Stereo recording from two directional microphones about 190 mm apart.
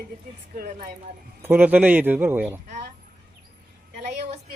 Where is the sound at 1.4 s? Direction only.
10° right (ahead or behind).